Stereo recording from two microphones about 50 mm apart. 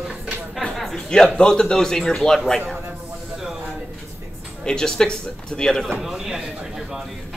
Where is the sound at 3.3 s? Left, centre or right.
Centre.